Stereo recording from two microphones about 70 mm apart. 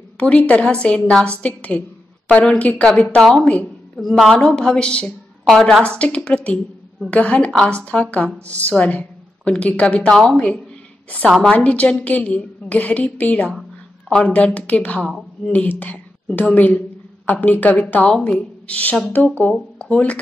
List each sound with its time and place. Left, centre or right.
0.2 s a woman's voice: centre
13.5 s a sound: centre
14.3 s a woman's voice: centre
19.5 s speech: centre